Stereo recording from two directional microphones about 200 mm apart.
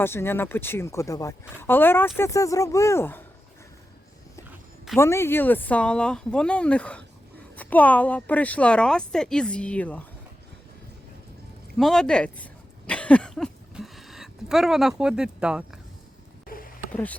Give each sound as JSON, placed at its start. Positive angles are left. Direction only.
{"t": 0.0, "sound": "a woman's voice", "side_deg": 10}
{"t": 4.9, "sound": "a woman's voice", "side_deg": 15}
{"t": 11.8, "sound": "speech", "side_deg": 5}
{"t": 12.9, "sound": "a sound", "side_deg": 5}
{"t": 16.5, "sound": "a sound", "side_deg": 45}
{"t": 16.9, "sound": "a woman's voice", "side_deg": 5}